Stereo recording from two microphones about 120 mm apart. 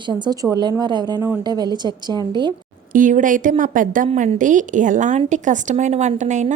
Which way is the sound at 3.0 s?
90° right.